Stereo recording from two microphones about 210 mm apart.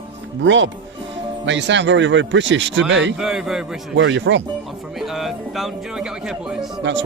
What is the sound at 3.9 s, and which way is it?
Speech, 60° right (ahead or behind).